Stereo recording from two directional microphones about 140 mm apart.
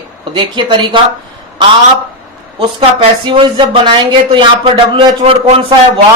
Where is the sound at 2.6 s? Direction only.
35° right (ahead or behind).